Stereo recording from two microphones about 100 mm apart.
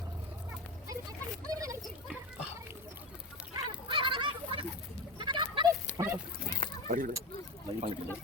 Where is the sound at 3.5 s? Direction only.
50° right (ahead or behind).